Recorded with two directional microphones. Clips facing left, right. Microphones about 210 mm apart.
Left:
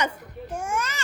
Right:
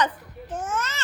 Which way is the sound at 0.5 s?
10° left (ahead or behind).